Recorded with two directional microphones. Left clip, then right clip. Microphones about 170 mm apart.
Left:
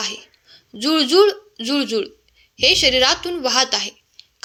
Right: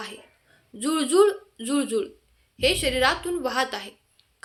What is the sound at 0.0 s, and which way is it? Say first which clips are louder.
A woman's voice: left 11 dB; 20° left (ahead or behind).